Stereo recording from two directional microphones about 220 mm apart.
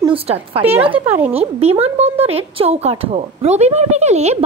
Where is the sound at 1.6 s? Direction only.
25° right (ahead or behind).